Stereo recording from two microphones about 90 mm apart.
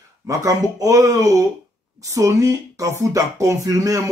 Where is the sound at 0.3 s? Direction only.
40° right (ahead or behind).